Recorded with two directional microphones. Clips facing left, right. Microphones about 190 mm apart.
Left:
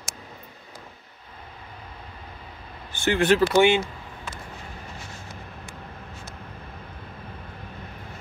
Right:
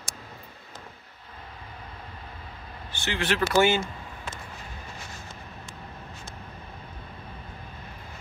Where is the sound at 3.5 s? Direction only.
15° left (ahead or behind).